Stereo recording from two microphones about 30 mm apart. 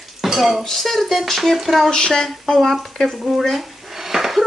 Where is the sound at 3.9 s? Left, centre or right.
Centre.